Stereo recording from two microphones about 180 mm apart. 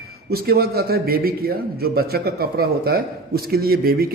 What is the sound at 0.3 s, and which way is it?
A man's voice, 60° right (ahead or behind).